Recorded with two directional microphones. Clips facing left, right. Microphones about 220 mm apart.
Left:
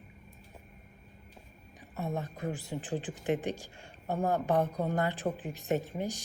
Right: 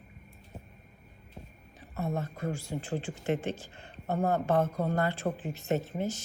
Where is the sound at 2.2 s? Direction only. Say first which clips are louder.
Right 2 dB; 15° left (ahead or behind).